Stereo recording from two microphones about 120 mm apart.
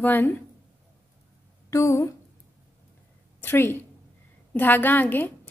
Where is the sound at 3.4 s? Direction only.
20° left (ahead or behind).